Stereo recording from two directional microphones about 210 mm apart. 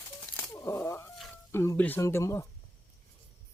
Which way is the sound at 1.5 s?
10° left (ahead or behind).